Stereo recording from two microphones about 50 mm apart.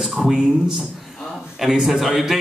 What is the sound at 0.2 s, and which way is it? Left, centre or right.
A man's voice, centre.